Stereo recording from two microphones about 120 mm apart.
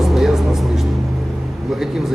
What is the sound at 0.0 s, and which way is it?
Music, centre (ahead or behind).